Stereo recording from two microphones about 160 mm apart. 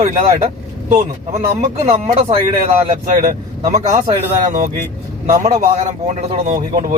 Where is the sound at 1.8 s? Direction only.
40° right (ahead or behind).